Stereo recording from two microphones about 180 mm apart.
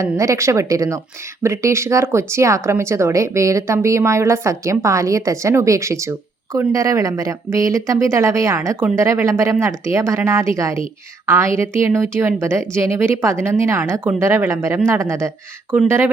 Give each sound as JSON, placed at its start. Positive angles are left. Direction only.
{"t": 0.0, "sound": "speech", "side_deg": -15}